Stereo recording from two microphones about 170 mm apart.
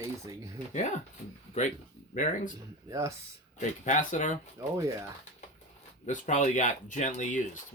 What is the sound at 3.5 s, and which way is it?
Speech, 50° left (ahead or behind).